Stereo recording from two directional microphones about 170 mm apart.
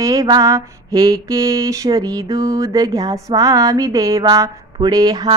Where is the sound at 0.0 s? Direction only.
20° right (ahead or behind).